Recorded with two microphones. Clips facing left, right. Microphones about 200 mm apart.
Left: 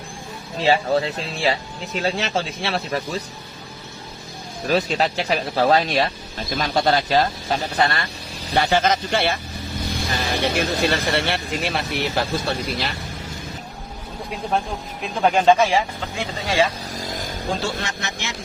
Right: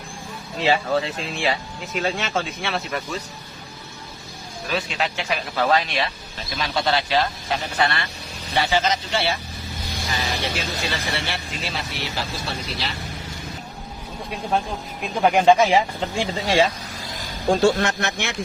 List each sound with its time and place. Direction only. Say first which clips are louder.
0.6 s speech: left 2 dB; 35° left (ahead or behind)
4.7 s speech: left 6 dB; 40° left (ahead or behind)
8.6 s speech: left 2 dB; 50° left (ahead or behind)
15.2 s speech: even; 10° right (ahead or behind)
15.7 s speech: right 2 dB; 25° right (ahead or behind)
17.0 s a sound: left 7 dB; 45° left (ahead or behind)
17.5 s speech: right 9 dB; 55° right (ahead or behind)